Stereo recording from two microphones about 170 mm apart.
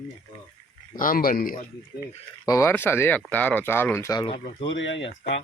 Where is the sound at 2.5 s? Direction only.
20° left (ahead or behind).